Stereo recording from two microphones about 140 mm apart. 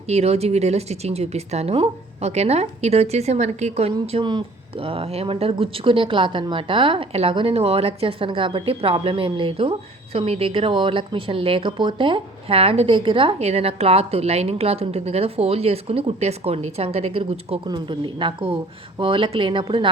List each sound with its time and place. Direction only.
0.1 s speech: 50° right (ahead or behind)
4.1 s speech: 35° right (ahead or behind)
17.7 s speech: 35° right (ahead or behind)